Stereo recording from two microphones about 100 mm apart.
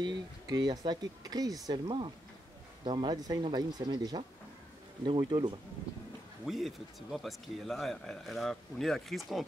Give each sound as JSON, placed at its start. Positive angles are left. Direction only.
{"t": 0.0, "sound": "speech", "side_deg": -45}
{"t": 2.8, "sound": "speech", "side_deg": -50}
{"t": 5.0, "sound": "speech", "side_deg": -55}
{"t": 6.4, "sound": "speech", "side_deg": 0}